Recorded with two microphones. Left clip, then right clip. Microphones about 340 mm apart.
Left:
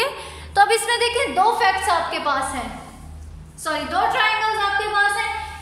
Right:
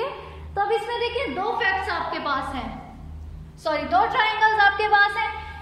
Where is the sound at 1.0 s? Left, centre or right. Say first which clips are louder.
Left 7 dB; centre.